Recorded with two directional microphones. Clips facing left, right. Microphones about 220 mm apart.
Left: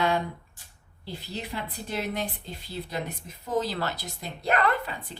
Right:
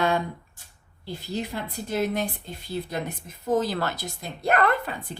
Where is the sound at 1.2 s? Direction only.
45° right (ahead or behind).